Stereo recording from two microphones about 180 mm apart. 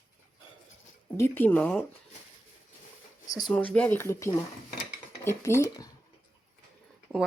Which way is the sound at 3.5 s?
5° left (ahead or behind).